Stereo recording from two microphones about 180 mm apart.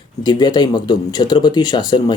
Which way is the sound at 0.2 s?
25° left (ahead or behind).